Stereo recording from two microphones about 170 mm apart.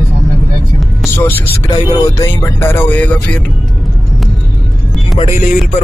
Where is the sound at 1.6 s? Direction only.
25° left (ahead or behind).